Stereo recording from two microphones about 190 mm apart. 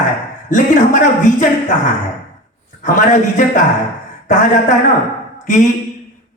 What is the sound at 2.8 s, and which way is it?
A man's voice, 40° left (ahead or behind).